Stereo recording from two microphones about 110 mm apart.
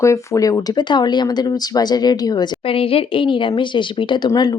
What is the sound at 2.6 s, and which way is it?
A woman's voice, 55° left (ahead or behind).